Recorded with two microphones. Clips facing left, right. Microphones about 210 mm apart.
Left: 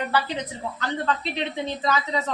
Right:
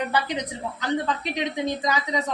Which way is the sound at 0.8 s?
15° right (ahead or behind).